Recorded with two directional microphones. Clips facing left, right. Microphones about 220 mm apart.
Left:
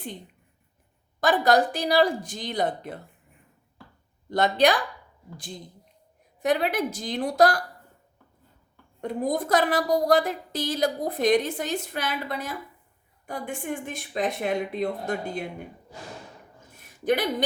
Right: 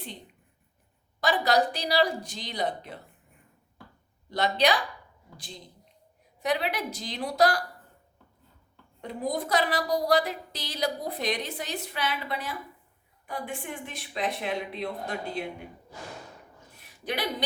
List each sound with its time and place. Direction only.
1.2 s a woman's voice: 50° left (ahead or behind)
4.3 s a woman's voice: 50° left (ahead or behind)
6.4 s a woman's voice: 50° left (ahead or behind)
9.0 s a woman's voice: 50° left (ahead or behind)
16.8 s a sound: 45° left (ahead or behind)